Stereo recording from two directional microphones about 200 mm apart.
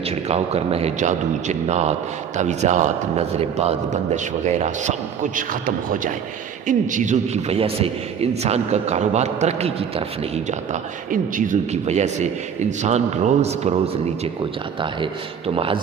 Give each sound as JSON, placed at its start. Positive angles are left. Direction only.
{"t": 0.3, "sound": "a man's voice", "side_deg": -30}
{"t": 15.5, "sound": "speech", "side_deg": -25}